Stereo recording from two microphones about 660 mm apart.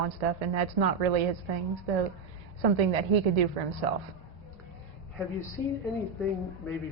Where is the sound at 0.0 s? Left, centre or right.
Right.